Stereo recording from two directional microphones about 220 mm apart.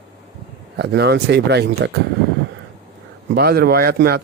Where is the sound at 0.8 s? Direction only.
50° right (ahead or behind).